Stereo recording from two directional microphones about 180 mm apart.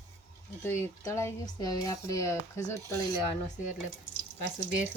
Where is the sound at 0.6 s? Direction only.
15° left (ahead or behind).